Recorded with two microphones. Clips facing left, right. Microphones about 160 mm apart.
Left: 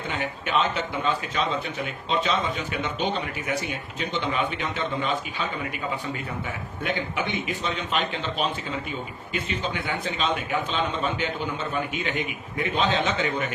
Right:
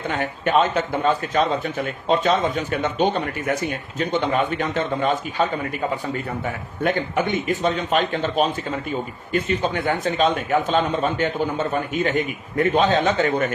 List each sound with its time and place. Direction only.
0.1 s a man's voice: 45° right (ahead or behind)